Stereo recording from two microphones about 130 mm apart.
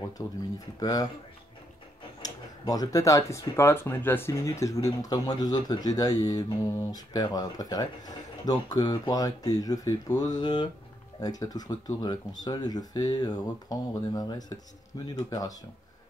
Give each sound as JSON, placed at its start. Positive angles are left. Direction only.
{"t": 0.2, "sound": "speech", "side_deg": 20}
{"t": 2.2, "sound": "speech", "side_deg": 30}